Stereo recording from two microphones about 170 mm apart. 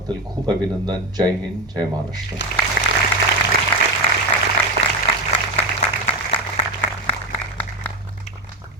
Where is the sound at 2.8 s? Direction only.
60° left (ahead or behind).